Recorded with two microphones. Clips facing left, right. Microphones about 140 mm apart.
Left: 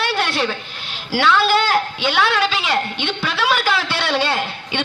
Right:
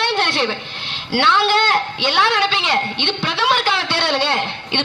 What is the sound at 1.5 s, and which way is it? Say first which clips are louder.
A woman's voice: even; 5° left (ahead or behind).